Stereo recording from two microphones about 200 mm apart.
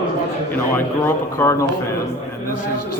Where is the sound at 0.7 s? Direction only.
10° left (ahead or behind).